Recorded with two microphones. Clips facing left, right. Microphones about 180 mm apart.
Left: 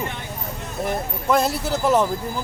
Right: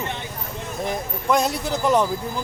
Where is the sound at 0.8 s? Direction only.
5° left (ahead or behind).